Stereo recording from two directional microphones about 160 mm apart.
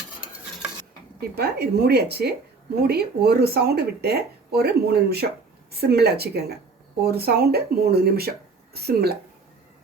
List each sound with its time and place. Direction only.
1.4 s speech: 90° right